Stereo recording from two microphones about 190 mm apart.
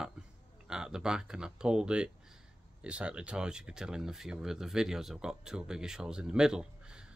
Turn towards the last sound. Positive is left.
turn(degrees=-5)  # may be behind; listen again after turning